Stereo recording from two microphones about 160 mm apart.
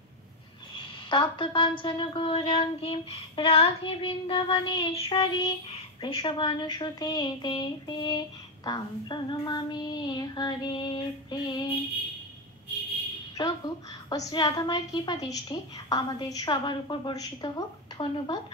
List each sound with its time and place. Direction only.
0.7 s a woman's voice: 30° left (ahead or behind)
13.4 s a woman's voice: 20° left (ahead or behind)